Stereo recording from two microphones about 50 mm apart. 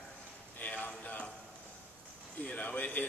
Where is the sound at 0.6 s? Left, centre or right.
Left.